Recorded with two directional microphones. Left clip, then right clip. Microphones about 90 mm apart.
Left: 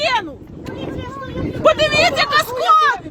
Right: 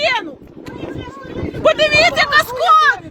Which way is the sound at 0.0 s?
25° left (ahead or behind).